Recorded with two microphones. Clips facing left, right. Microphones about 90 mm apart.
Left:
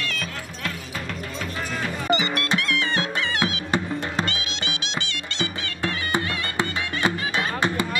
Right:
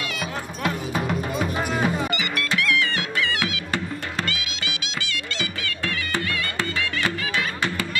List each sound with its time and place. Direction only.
0.0 s music: 10° right (ahead or behind)
2.0 s music: 25° left (ahead or behind)